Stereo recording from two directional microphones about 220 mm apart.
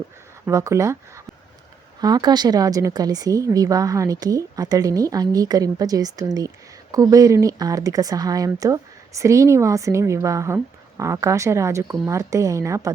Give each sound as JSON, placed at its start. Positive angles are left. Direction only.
{"t": 0.4, "sound": "speech", "side_deg": -15}